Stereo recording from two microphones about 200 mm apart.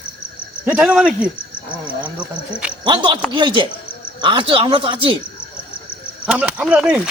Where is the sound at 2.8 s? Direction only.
25° right (ahead or behind).